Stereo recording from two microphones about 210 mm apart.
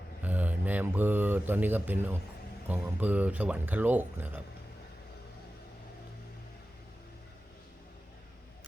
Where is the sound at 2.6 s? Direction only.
10° right (ahead or behind).